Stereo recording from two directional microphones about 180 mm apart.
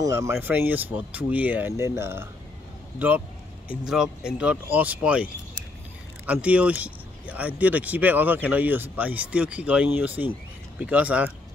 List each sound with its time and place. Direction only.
0.0 s speech: 15° right (ahead or behind)
3.6 s speech: 5° right (ahead or behind)